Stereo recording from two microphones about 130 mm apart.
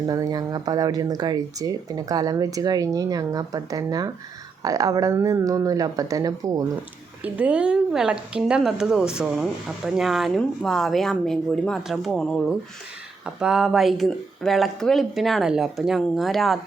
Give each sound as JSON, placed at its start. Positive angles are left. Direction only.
{"t": 0.1, "sound": "speech", "side_deg": -30}
{"t": 7.2, "sound": "speech", "side_deg": -10}